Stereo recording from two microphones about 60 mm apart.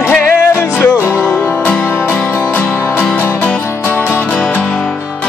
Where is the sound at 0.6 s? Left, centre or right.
Left.